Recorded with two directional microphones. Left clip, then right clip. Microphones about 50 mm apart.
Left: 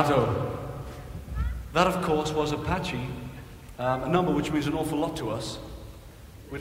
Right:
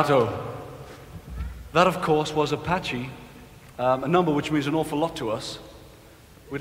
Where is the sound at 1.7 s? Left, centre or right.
Left.